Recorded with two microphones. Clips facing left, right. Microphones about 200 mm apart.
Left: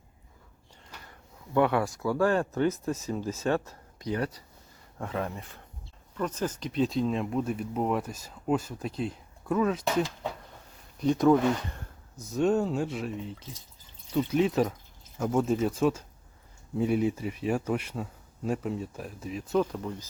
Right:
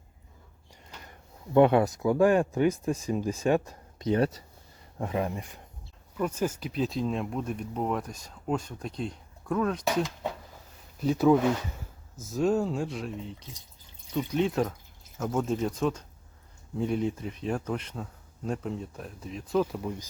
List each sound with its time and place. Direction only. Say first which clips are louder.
1.5 s speech: right 5 dB; 20° right (ahead or behind); by 9.8 s 5° left (ahead or behind)
9.9 s a sound: even; centre (ahead or behind)
11.0 s speech: even; 5° right (ahead or behind)
19.7 s speech: right 1 dB; 10° right (ahead or behind)